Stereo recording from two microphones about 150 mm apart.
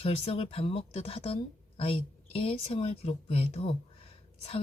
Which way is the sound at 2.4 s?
40° left (ahead or behind).